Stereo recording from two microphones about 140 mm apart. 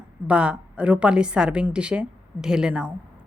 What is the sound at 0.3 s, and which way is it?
A woman's voice, 10° right (ahead or behind).